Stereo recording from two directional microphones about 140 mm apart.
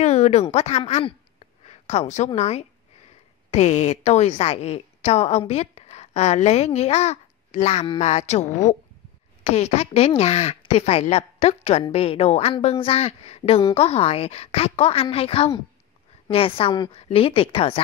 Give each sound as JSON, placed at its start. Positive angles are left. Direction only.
{"t": 0.0, "sound": "a woman's voice", "side_deg": 50}